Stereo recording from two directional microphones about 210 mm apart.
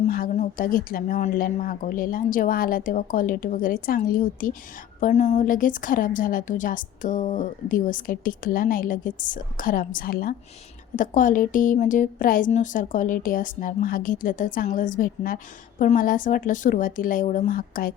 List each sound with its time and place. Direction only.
0.1 s a woman's voice: 40° left (ahead or behind)